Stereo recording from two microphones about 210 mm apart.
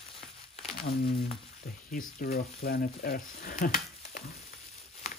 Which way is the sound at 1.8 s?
40° left (ahead or behind).